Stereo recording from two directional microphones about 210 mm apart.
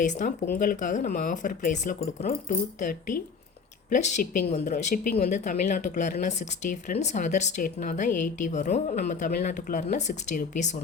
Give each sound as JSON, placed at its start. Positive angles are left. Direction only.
{"t": 0.0, "sound": "speech", "side_deg": 35}